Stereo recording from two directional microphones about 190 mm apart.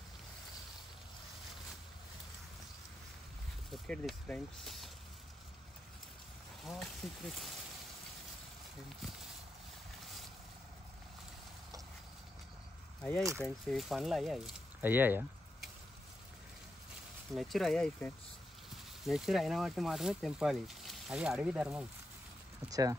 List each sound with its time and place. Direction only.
3.7 s speech: 5° left (ahead or behind)
6.6 s speech: centre (ahead or behind)
13.4 s speech: centre (ahead or behind)
17.3 s speech: centre (ahead or behind)
22.7 s speech: 15° right (ahead or behind)